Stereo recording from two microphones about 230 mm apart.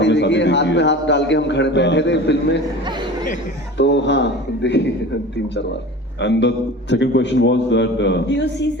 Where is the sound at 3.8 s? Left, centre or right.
Left.